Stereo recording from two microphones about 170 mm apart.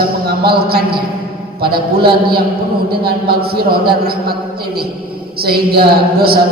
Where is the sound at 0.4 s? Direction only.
65° right (ahead or behind).